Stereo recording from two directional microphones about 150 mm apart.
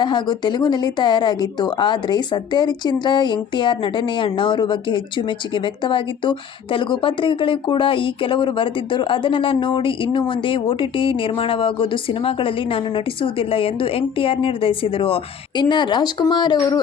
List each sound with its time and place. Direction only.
0.0 s speech: 30° left (ahead or behind)